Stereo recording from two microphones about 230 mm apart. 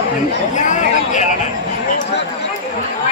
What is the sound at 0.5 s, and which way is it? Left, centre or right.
Chatter, left.